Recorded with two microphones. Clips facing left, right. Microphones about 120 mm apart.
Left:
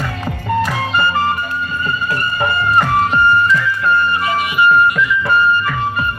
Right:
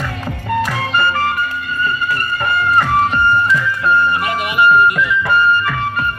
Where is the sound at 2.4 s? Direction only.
20° left (ahead or behind).